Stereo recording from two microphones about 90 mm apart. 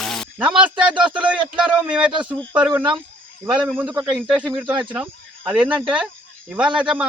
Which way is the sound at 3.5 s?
15° right (ahead or behind).